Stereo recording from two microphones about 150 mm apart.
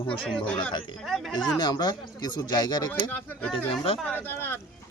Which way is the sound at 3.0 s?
15° left (ahead or behind).